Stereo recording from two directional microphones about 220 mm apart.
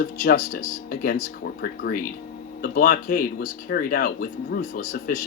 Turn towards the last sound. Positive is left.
turn(degrees=35)  # may be behind; listen again after turning